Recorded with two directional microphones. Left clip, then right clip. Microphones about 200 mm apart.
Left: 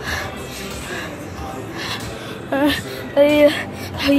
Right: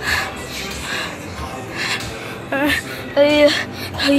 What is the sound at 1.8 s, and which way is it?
Gasp, 10° left (ahead or behind).